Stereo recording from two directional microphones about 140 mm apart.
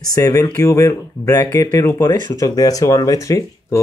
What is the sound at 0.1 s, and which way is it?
Speech, 25° left (ahead or behind).